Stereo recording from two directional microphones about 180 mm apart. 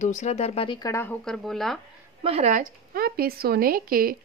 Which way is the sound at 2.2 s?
35° right (ahead or behind).